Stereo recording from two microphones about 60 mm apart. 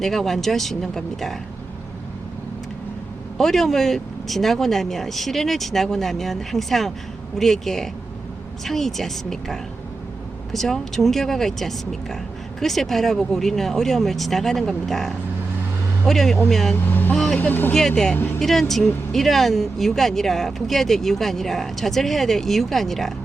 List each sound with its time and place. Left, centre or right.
0.0 s speech: centre
3.3 s speech: centre
16.8 s speech: left
17.7 s speech: centre